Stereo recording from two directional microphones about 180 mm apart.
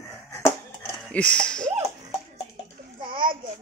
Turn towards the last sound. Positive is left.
turn(degrees=-25)  # may be behind; listen again after turning